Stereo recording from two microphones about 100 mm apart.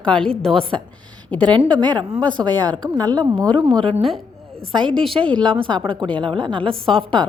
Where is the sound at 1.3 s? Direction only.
15° left (ahead or behind).